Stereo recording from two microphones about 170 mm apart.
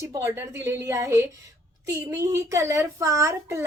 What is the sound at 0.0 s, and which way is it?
A woman's voice, 15° right (ahead or behind).